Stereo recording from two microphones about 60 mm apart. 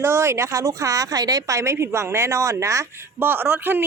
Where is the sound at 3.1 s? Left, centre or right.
Right.